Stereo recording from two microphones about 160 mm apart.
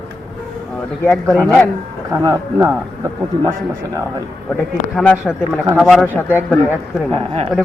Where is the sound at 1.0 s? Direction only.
10° left (ahead or behind).